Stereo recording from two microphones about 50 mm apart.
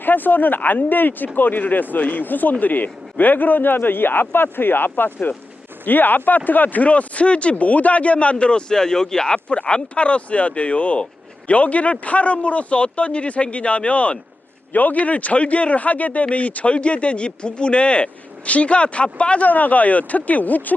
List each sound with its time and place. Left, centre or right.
0.0 s speech: left
19.5 s speech: left